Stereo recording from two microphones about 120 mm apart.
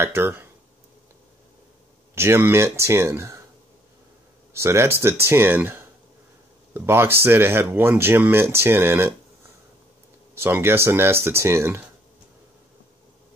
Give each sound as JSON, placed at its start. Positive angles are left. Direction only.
{"t": 0.0, "sound": "speech", "side_deg": -20}
{"t": 2.1, "sound": "speech", "side_deg": -20}
{"t": 4.6, "sound": "speech", "side_deg": -20}
{"t": 10.3, "sound": "speech", "side_deg": -20}